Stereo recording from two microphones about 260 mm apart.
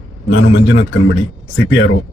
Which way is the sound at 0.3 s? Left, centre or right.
Left.